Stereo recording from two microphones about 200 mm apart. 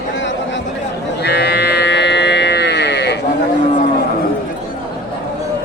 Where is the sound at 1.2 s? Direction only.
55° left (ahead or behind).